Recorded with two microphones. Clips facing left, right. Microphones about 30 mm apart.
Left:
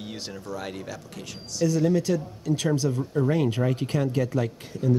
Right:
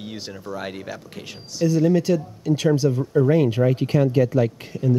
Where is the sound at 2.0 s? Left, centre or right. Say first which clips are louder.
Right 4 dB; right.